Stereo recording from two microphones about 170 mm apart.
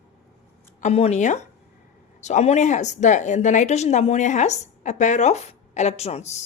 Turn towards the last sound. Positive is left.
turn(degrees=40)  # may be behind; listen again after turning